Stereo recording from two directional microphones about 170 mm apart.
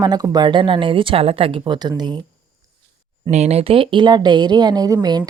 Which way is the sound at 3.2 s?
40° right (ahead or behind).